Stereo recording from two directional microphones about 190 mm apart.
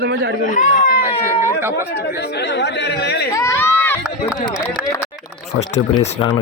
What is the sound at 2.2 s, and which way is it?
Speech, 60° left (ahead or behind).